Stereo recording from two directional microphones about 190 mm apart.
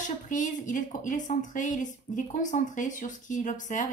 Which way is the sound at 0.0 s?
40° left (ahead or behind).